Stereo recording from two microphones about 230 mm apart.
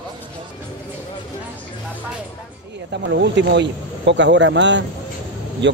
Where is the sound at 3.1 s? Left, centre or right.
Right.